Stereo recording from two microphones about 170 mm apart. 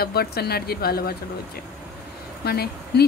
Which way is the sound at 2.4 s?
65° left (ahead or behind).